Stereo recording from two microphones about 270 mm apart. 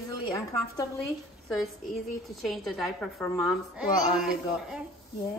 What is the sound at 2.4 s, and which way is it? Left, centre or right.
A woman's voice, centre.